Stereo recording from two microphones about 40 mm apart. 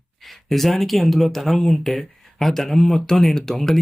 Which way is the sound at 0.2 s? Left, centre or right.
Centre.